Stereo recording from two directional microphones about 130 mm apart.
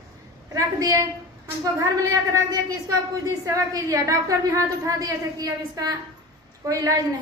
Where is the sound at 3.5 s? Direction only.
25° right (ahead or behind).